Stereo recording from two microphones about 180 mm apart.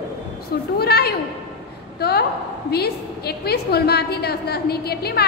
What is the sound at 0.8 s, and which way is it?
A woman's voice, 60° left (ahead or behind).